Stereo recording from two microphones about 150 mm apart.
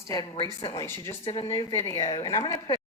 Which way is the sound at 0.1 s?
25° left (ahead or behind).